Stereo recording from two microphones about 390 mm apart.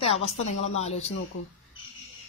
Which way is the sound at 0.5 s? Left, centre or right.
Centre.